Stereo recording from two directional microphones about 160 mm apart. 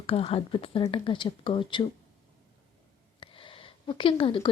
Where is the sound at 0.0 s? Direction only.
35° left (ahead or behind).